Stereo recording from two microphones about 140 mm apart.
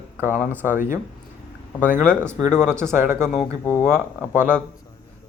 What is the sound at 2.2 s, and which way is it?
Speech, 20° right (ahead or behind).